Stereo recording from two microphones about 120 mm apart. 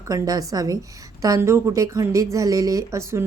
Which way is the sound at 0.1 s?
30° right (ahead or behind).